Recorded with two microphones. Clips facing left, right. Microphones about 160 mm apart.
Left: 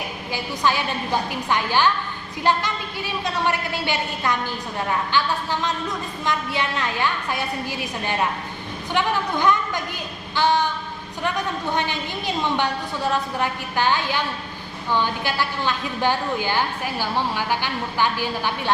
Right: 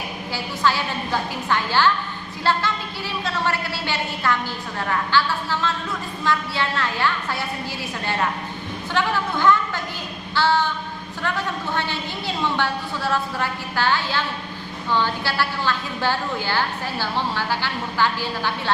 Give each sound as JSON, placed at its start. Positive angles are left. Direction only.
{"t": 0.3, "sound": "a woman's voice", "side_deg": 15}